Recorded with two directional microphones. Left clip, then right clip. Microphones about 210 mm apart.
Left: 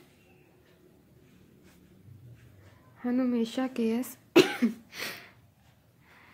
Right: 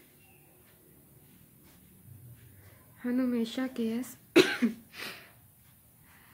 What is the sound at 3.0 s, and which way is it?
Speech, 20° left (ahead or behind).